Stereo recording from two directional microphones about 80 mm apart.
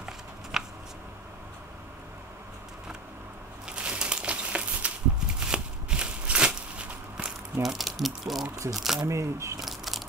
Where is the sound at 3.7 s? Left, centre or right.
Centre.